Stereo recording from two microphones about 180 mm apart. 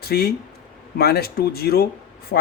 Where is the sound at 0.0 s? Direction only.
60° left (ahead or behind).